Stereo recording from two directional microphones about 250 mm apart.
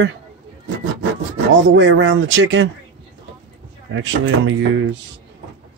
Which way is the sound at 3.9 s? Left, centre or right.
Right.